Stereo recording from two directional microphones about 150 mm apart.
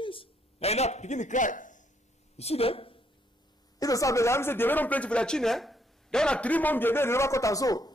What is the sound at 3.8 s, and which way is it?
Speech, 20° left (ahead or behind).